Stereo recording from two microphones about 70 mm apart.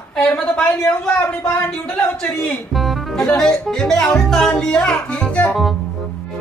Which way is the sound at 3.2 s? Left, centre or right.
Centre.